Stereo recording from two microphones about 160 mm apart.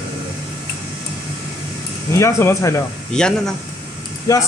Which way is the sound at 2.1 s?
15° left (ahead or behind).